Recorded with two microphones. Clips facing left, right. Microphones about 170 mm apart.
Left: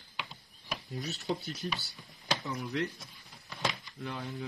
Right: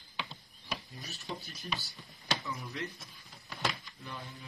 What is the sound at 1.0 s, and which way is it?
Speech, 70° left (ahead or behind).